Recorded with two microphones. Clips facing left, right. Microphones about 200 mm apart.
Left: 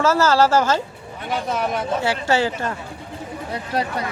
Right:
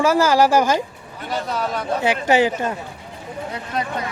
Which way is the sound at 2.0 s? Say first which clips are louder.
Right 5 dB; 15° right (ahead or behind).